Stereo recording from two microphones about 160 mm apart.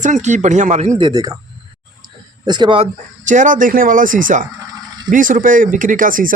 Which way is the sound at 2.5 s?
30° right (ahead or behind).